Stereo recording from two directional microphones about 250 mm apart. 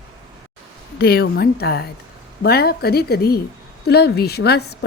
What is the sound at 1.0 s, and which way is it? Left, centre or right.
Speech, left.